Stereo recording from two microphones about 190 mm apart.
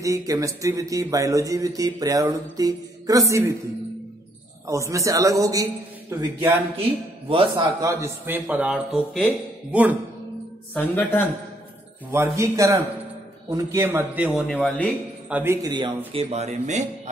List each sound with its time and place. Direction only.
0.0 s a man's voice: 15° right (ahead or behind)
4.6 s a man's voice: 15° right (ahead or behind)
6.8 s a man's voice: 30° right (ahead or behind)
7.8 s a man's voice: 15° right (ahead or behind)
10.7 s speech: 5° left (ahead or behind)
12.4 s a man's voice: 15° right (ahead or behind)
14.6 s speech: 5° left (ahead or behind)
15.2 s a man's voice: 10° right (ahead or behind)
16.1 s speech: 35° right (ahead or behind)